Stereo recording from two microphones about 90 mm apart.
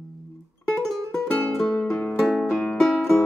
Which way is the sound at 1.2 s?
15° left (ahead or behind).